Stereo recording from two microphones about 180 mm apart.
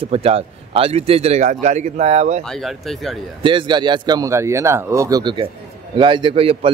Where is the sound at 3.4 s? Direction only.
25° right (ahead or behind).